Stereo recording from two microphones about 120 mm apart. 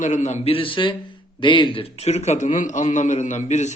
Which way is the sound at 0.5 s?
45° left (ahead or behind).